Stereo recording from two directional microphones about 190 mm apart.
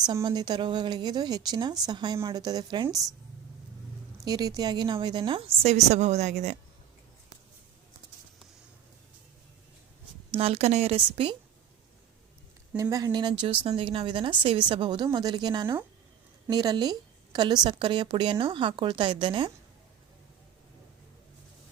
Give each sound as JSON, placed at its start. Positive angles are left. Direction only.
{"t": 0.0, "sound": "a woman's voice", "side_deg": -20}
{"t": 4.2, "sound": "a woman's voice", "side_deg": -20}
{"t": 10.3, "sound": "a woman's voice", "side_deg": -30}
{"t": 12.7, "sound": "a woman's voice", "side_deg": -20}